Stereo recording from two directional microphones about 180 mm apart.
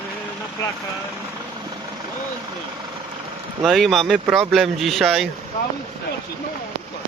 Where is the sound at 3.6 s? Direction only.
Centre (ahead or behind).